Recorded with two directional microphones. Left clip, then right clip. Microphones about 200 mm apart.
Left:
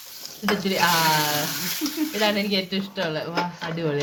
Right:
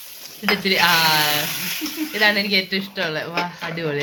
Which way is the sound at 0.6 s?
Centre (ahead or behind).